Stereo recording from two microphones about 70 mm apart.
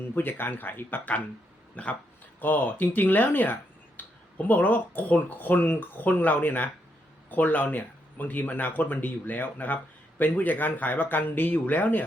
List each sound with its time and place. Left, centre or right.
0.1 s speech: left